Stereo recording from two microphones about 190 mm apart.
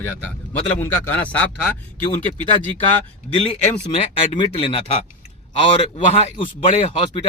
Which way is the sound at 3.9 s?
30° left (ahead or behind).